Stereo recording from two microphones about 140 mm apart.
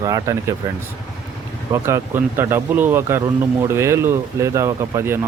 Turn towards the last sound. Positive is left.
turn(degrees=-20)  # may be behind; listen again after turning